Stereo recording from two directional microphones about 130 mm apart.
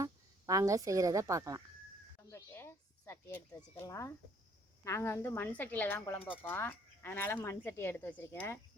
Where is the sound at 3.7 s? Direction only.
20° left (ahead or behind).